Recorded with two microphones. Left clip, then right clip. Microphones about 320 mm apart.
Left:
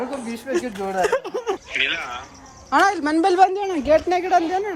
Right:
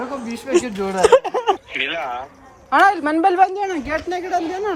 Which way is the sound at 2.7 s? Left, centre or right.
Centre.